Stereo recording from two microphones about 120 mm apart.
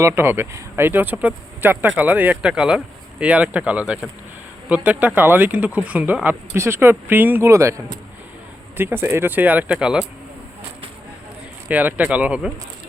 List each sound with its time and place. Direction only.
0.0 s speech: 20° right (ahead or behind)
8.8 s speech: 20° right (ahead or behind)
11.7 s speech: 15° right (ahead or behind)